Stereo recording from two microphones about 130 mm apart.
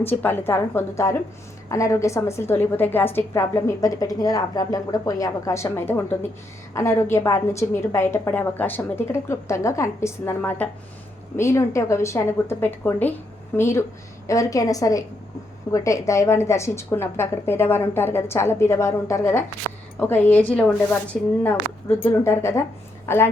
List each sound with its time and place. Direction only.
0.0 s a woman's voice: 15° left (ahead or behind)